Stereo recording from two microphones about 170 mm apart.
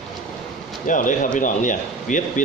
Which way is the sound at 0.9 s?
50° left (ahead or behind).